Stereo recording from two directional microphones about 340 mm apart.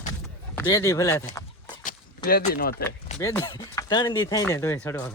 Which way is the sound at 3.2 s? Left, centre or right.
Centre.